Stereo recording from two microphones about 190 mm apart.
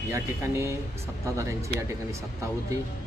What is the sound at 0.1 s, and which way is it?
Speech, 15° right (ahead or behind).